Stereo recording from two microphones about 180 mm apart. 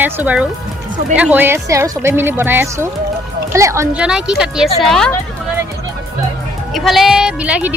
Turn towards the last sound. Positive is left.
turn(degrees=-10)  # may be behind; listen again after turning